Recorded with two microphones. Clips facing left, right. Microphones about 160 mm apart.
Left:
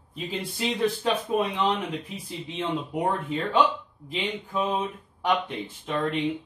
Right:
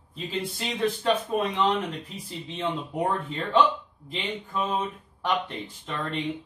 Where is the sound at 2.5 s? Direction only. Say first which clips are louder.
Even; 10° left (ahead or behind).